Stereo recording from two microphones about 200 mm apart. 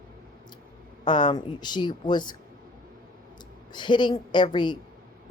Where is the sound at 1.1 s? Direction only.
20° left (ahead or behind).